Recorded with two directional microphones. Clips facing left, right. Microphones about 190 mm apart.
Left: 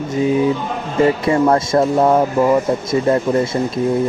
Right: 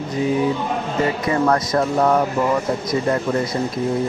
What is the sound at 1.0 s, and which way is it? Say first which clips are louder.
Speech: left 6 dB; 25° left (ahead or behind).